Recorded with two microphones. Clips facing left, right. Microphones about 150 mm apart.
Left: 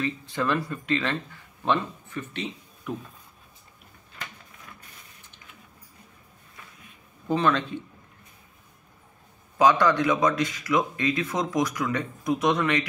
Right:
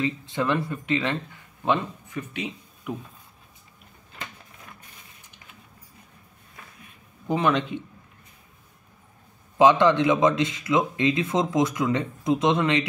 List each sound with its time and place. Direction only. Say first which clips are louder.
0.0 s a man's voice: right 2 dB; 20° right (ahead or behind)
7.2 s a man's voice: right 1 dB; 15° right (ahead or behind)
9.6 s a man's voice: right 3 dB; 25° right (ahead or behind)